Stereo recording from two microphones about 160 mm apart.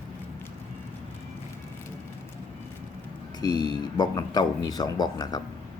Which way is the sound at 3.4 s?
25° left (ahead or behind).